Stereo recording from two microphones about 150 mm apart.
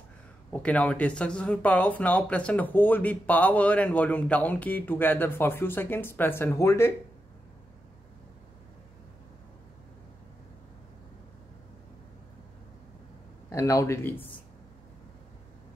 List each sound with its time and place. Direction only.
0.5 s speech: 10° left (ahead or behind)
13.5 s speech: 20° left (ahead or behind)